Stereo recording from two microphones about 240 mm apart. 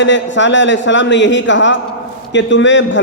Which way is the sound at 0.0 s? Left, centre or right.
Left.